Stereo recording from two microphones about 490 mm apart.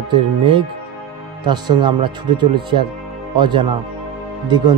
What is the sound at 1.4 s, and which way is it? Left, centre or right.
Speech, centre.